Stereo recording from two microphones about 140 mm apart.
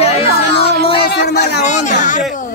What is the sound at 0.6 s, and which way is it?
Speech, 45° left (ahead or behind).